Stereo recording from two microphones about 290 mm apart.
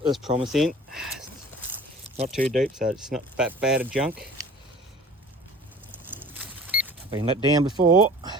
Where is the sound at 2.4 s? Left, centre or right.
Right.